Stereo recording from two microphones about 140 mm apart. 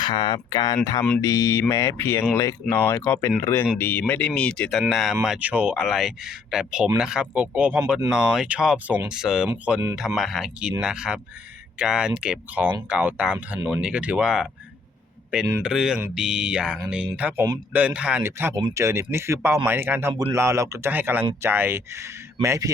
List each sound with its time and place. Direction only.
0.0 s speech: 35° left (ahead or behind); by 14.4 s 5° right (ahead or behind)
15.6 s speech: 5° right (ahead or behind); by 22.7 s 25° right (ahead or behind)